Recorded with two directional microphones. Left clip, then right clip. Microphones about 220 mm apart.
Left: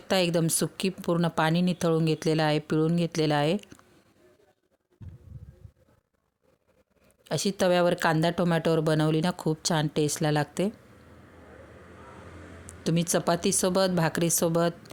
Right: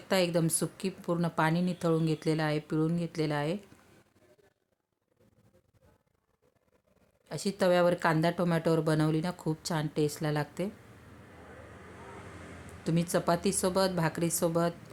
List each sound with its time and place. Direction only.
0.1 s speech: 35° left (ahead or behind)
7.3 s speech: 35° left (ahead or behind)
12.8 s speech: 35° left (ahead or behind)